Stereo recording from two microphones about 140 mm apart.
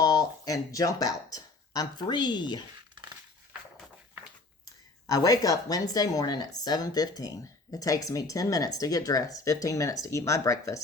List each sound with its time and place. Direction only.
0.0 s speech: 25° left (ahead or behind)
5.0 s speech: 25° left (ahead or behind)